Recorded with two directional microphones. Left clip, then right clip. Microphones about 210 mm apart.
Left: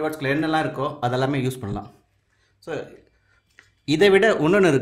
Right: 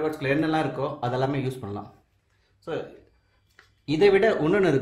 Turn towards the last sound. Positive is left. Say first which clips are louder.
# left 4 dB
turn(degrees=30)  # may be behind; listen again after turning